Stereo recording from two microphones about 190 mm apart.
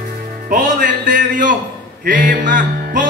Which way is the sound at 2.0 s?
45° right (ahead or behind).